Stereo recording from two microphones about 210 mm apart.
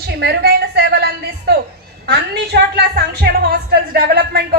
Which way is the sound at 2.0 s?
50° right (ahead or behind).